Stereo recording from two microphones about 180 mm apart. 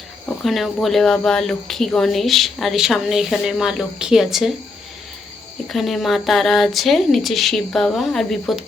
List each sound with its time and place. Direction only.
0.3 s speech: centre (ahead or behind)
5.6 s speech: centre (ahead or behind)